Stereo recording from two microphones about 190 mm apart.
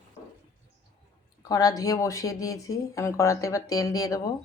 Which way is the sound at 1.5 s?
20° left (ahead or behind).